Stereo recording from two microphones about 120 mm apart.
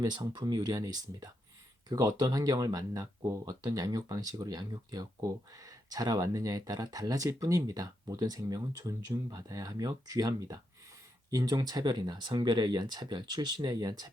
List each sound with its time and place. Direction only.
0.0 s speech: 35° right (ahead or behind)